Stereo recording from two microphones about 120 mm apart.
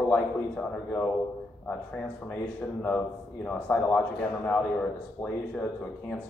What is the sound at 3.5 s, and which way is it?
A man's voice, 15° left (ahead or behind).